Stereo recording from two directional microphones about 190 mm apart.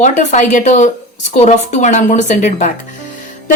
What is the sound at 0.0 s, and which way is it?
A woman's voice, 40° left (ahead or behind).